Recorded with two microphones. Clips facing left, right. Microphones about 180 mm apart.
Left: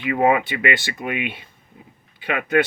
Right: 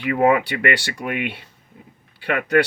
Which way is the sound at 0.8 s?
80° right.